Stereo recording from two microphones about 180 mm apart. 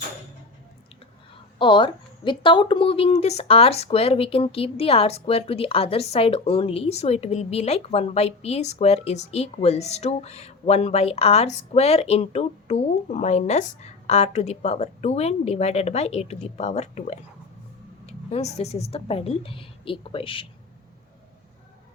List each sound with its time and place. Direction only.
1.5 s a woman's voice: 25° left (ahead or behind)